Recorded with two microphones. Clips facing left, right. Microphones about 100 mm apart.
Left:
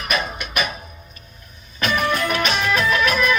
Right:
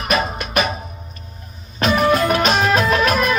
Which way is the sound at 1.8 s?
45° right (ahead or behind).